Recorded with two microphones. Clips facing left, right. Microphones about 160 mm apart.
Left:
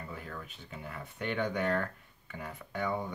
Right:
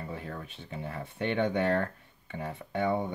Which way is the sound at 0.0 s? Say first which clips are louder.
Right 4 dB; 30° right (ahead or behind).